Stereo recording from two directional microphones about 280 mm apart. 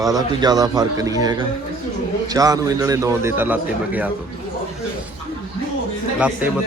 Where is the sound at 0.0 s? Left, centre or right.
Centre.